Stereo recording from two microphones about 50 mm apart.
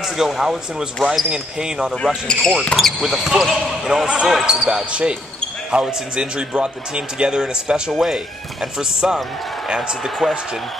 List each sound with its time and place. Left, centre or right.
0.0 s speech: centre
2.2 s speech: centre
2.7 s speech: centre
10.0 s speech: centre